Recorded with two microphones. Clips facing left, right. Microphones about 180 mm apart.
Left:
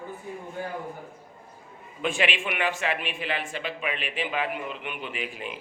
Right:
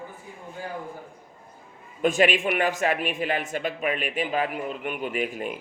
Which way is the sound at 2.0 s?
45° right (ahead or behind).